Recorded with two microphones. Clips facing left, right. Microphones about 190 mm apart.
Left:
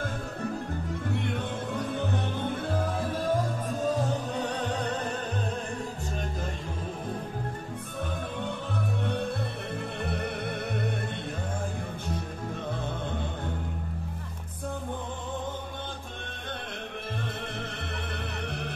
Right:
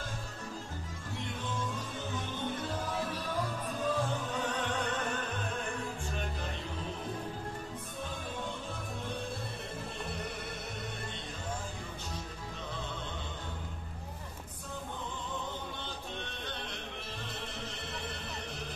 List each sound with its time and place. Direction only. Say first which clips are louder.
1.4 s music: left 6 dB; 60° left (ahead or behind)
3.8 s music: left 4 dB; 40° left (ahead or behind)
9.0 s music: left 7 dB; 65° left (ahead or behind)